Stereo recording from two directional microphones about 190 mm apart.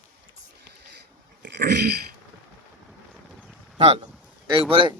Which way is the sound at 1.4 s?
60° right (ahead or behind).